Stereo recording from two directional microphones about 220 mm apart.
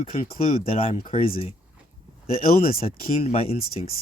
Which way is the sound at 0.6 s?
25° left (ahead or behind).